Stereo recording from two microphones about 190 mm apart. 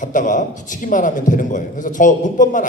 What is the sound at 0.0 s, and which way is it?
A man's voice, 45° left (ahead or behind).